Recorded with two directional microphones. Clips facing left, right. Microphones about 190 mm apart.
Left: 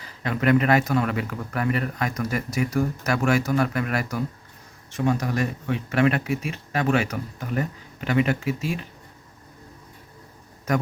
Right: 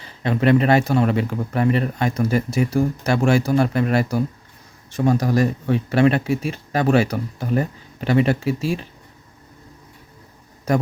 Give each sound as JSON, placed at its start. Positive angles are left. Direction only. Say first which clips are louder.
{"t": 0.0, "sound": "speech", "louder": "right 5 dB", "side_deg": -25}
{"t": 10.7, "sound": "a man's voice", "louder": "right 4 dB", "side_deg": -30}